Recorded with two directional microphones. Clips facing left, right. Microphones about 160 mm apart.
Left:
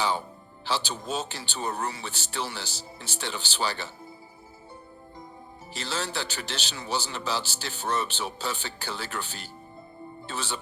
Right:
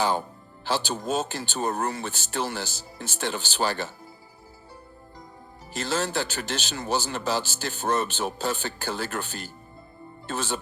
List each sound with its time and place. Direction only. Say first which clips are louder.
0.0 s speech: right 3 dB; 50° right (ahead or behind)
5.7 s speech: right 5 dB; 50° right (ahead or behind)